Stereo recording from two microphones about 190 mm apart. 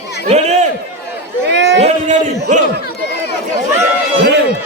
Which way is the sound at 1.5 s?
65° right (ahead or behind).